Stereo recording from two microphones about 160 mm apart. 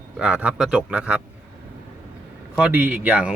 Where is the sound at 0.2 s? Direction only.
5° right (ahead or behind).